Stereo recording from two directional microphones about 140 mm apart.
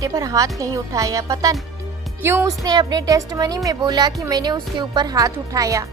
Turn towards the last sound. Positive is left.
turn(degrees=-25)  # may be behind; listen again after turning